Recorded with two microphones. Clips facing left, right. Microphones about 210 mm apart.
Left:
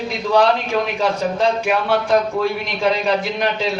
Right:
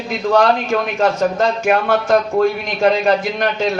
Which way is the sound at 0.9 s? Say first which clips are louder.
Right 3 dB; 45° right (ahead or behind).